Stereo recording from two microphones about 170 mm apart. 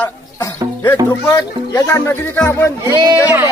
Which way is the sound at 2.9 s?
25° right (ahead or behind).